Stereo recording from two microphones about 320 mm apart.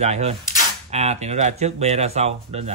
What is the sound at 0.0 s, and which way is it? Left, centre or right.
Speech, right.